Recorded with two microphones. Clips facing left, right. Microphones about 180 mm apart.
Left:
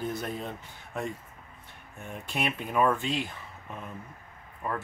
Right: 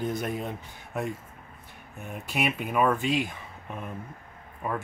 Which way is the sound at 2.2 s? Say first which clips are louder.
Right 3 dB; 5° right (ahead or behind).